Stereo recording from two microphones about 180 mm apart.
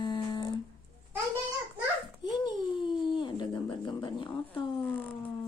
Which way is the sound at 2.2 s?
25° left (ahead or behind).